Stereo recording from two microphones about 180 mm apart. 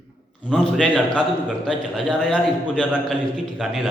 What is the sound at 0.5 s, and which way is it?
A man's voice, 5° left (ahead or behind).